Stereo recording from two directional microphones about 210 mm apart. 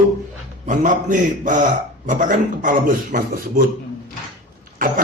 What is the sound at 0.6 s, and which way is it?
A man's voice, 35° right (ahead or behind).